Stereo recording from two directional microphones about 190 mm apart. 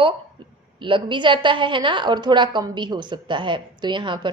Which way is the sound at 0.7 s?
25° right (ahead or behind).